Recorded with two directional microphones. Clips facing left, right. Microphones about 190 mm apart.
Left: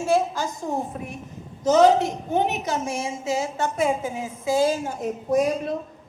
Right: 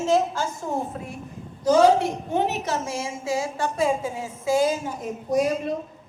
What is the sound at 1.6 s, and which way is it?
A woman's voice, 20° left (ahead or behind).